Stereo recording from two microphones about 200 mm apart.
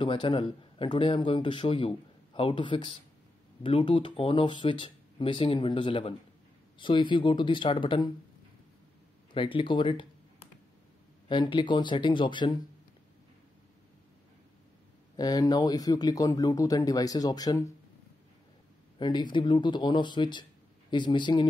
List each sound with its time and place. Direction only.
0.0 s a man's voice: 25° left (ahead or behind)
9.3 s a man's voice: 25° left (ahead or behind)
15.1 s a man's voice: 20° left (ahead or behind)
18.9 s a man's voice: 20° left (ahead or behind)